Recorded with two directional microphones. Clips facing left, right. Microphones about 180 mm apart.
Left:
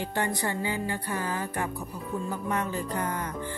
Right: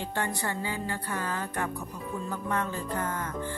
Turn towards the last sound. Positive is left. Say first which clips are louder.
# left 2 dB
turn(degrees=15)  # may be behind; listen again after turning